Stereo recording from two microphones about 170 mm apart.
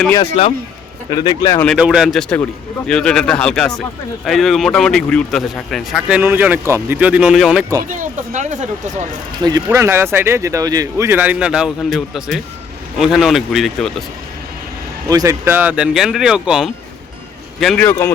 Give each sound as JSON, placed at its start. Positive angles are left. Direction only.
{"t": 0.4, "sound": "speech", "side_deg": 35}
{"t": 1.1, "sound": "speech", "side_deg": 25}
{"t": 1.6, "sound": "speech", "side_deg": 0}
{"t": 7.9, "sound": "speech", "side_deg": -50}
{"t": 9.4, "sound": "speech", "side_deg": -20}
{"t": 15.1, "sound": "speech", "side_deg": -20}